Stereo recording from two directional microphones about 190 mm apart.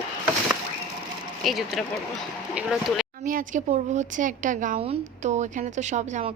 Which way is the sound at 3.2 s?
45° right (ahead or behind).